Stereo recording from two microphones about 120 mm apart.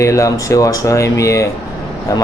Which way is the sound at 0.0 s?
25° left (ahead or behind).